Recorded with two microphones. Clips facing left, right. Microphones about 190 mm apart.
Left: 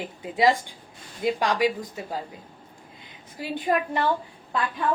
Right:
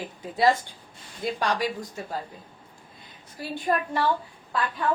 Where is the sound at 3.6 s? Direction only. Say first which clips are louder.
Left 1 dB; 15° left (ahead or behind).